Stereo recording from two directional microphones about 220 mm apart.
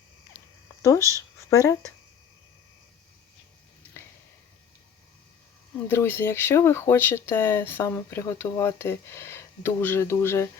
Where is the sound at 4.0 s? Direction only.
10° left (ahead or behind).